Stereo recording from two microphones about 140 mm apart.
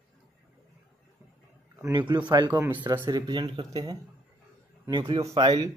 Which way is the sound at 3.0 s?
30° right (ahead or behind).